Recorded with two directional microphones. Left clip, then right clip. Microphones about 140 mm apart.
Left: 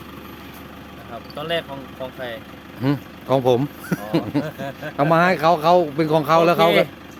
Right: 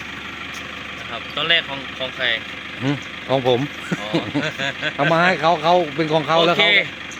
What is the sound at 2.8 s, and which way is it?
Speech, 25° left (ahead or behind).